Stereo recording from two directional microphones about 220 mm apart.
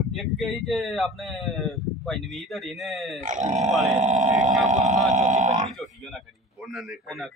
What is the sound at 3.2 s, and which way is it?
Grunt, 35° right (ahead or behind).